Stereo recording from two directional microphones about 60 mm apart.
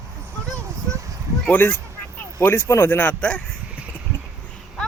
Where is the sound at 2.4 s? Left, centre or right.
Left.